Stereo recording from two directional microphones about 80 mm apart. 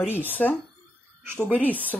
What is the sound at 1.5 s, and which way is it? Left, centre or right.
Speech, left.